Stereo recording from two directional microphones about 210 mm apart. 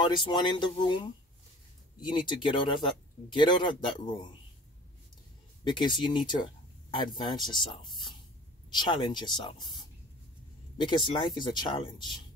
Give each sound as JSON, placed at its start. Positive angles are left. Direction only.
{"t": 0.0, "sound": "speech", "side_deg": 20}
{"t": 5.6, "sound": "speech", "side_deg": 20}